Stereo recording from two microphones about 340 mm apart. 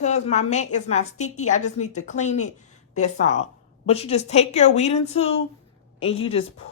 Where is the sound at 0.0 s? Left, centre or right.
Centre.